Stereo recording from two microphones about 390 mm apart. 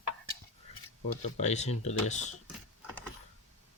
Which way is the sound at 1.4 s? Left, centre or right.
Centre.